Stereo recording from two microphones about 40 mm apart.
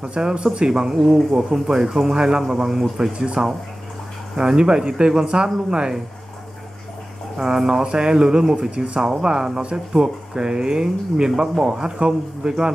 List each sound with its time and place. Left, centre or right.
0.0 s speech: right
0.9 s speech: centre
1.3 s speech: centre
7.4 s speech: centre